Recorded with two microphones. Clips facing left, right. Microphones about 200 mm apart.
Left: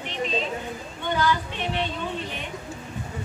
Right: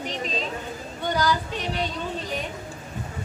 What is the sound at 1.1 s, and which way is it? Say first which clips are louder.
Speech: even; 40° right (ahead or behind).